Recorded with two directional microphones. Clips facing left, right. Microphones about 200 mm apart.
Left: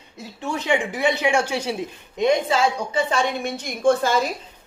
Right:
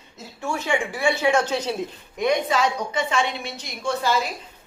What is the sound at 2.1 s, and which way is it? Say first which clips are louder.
A woman's voice: left 2 dB; 25° left (ahead or behind).